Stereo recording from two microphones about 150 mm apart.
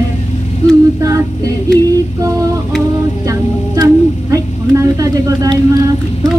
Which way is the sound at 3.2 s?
20° right (ahead or behind).